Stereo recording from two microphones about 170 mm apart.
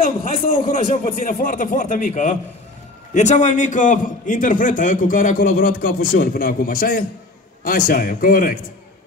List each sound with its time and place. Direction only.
0.2 s a man's voice: 50° left (ahead or behind)